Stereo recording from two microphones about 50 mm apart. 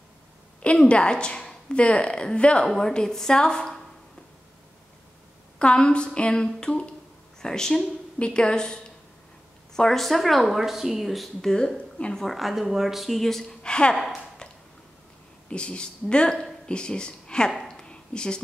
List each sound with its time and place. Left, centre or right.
0.6 s a woman's voice: left
5.6 s a woman's voice: left; by 11.2 s centre
11.4 s a woman's voice: centre
12.3 s a woman's voice: centre
13.9 s a woman's voice: centre
15.5 s speech: centre
17.6 s a sound: centre